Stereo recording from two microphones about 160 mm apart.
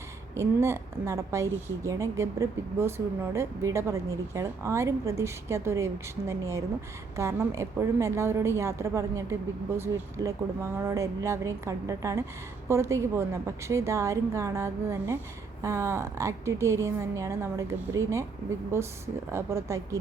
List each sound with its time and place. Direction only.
0.3 s a woman's voice: 15° right (ahead or behind)